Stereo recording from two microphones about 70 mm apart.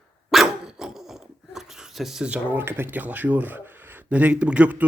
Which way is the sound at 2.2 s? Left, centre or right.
Right.